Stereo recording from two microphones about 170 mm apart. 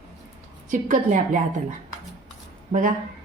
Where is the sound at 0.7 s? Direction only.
50° right (ahead or behind).